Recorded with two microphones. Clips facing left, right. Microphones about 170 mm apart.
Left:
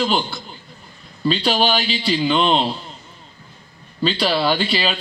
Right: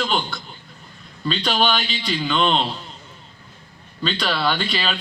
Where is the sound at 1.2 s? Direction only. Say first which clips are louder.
Left 3 dB; 35° left (ahead or behind).